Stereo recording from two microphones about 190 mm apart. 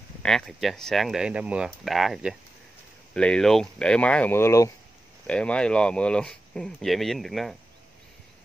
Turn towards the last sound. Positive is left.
turn(degrees=0)  # may be behind; listen again after turning